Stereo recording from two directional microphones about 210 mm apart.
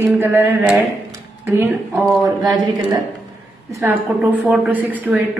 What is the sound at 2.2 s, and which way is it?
A woman's voice, 20° right (ahead or behind).